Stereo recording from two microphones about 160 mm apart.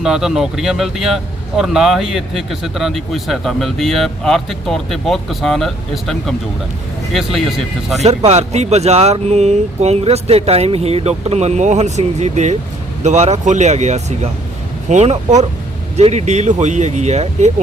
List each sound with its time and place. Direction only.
0.0 s speech: 5° right (ahead or behind)
8.0 s speech: 40° right (ahead or behind)